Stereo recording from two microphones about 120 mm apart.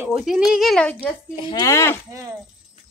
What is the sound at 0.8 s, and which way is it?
Speech, 10° left (ahead or behind).